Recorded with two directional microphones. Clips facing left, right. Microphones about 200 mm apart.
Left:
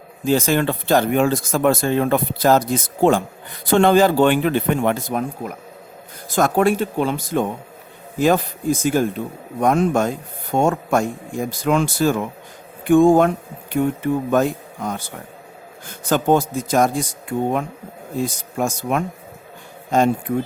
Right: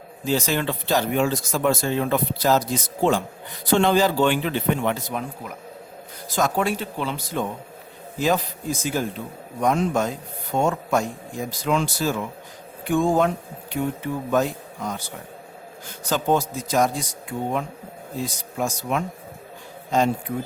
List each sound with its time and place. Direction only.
0.3 s speech: 50° left (ahead or behind)